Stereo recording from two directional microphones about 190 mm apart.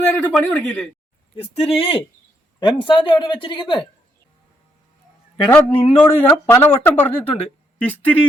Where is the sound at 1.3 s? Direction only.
30° left (ahead or behind).